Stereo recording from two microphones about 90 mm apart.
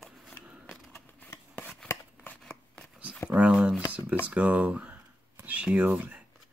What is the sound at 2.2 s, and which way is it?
Shuffling cards, 10° left (ahead or behind).